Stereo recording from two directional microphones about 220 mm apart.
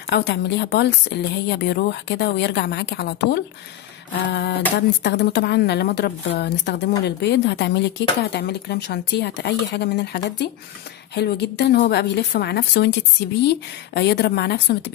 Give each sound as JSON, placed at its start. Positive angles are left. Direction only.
{"t": 0.0, "sound": "speech", "side_deg": 50}